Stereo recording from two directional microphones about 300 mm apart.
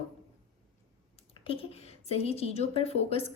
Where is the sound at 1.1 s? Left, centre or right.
Centre.